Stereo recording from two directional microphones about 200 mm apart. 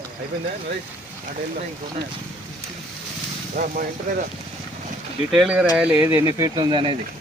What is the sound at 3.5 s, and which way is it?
Speech, 45° right (ahead or behind).